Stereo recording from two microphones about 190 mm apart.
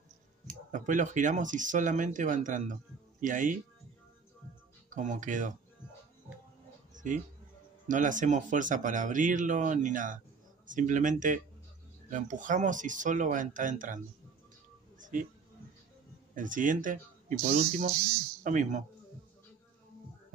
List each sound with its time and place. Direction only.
0.7 s speech: 40° right (ahead or behind)
4.8 s speech: 40° right (ahead or behind)
6.9 s a sound: 40° right (ahead or behind)
7.9 s speech: 40° right (ahead or behind)
15.0 s music: 45° right (ahead or behind)
16.3 s speech: 45° right (ahead or behind)